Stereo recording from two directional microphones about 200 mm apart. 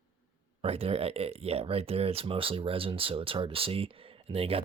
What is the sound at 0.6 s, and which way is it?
Speech, 30° right (ahead or behind).